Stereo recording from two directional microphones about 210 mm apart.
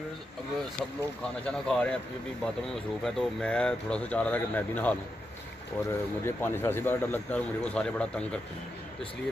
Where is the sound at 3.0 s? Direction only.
5° left (ahead or behind).